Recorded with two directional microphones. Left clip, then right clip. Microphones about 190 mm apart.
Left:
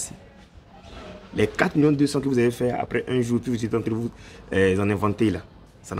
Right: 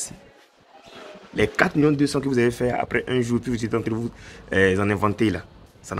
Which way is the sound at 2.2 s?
5° left (ahead or behind).